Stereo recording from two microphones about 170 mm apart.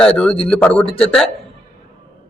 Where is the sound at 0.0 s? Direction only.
5° left (ahead or behind).